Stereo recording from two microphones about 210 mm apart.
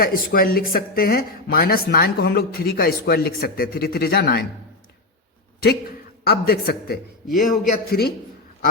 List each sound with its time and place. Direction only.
0.0 s speech: 45° left (ahead or behind)
6.2 s a man's voice: 45° left (ahead or behind)